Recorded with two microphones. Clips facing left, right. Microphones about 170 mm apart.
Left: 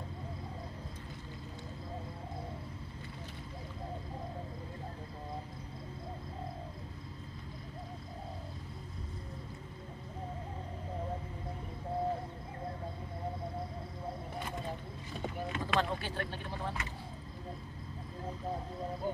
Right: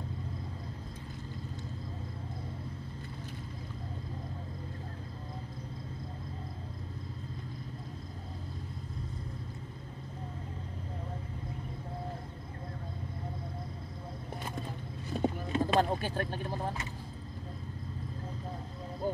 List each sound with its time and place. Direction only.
15.0 s vehicle: 40° right (ahead or behind)